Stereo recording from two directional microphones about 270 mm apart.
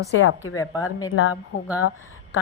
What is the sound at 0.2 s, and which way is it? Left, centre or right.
Speech, left.